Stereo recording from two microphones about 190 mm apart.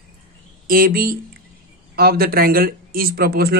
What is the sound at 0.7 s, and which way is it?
Speech, 50° right (ahead or behind).